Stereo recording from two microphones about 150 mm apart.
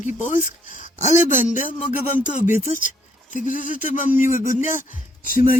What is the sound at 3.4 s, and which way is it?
Speech, 60° left (ahead or behind).